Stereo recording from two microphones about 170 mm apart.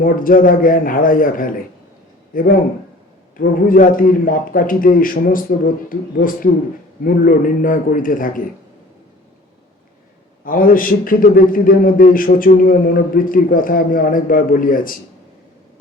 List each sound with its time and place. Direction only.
0.0 s a man's voice: 55° left (ahead or behind)
10.4 s a man's voice: 55° left (ahead or behind)